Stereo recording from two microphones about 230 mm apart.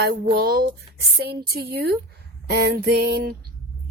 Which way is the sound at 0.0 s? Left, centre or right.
Right.